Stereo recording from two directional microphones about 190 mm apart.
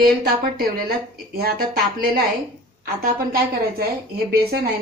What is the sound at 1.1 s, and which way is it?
Speech, 55° right (ahead or behind).